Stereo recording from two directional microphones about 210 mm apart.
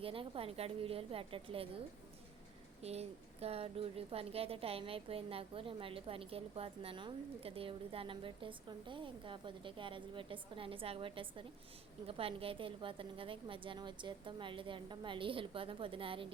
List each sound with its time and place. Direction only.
0.0 s a woman's voice: 25° right (ahead or behind)
2.8 s a woman's voice: 30° right (ahead or behind)